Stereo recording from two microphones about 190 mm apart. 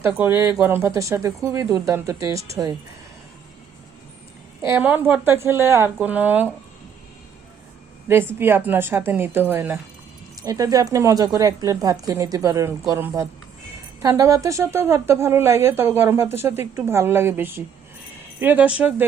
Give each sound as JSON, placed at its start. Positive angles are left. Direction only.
{"t": 0.0, "sound": "a woman's voice", "side_deg": -10}
{"t": 4.6, "sound": "a woman's voice", "side_deg": -10}
{"t": 8.0, "sound": "a woman's voice", "side_deg": -10}